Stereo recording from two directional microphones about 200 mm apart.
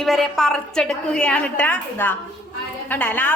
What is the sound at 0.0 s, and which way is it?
A woman's voice, centre (ahead or behind).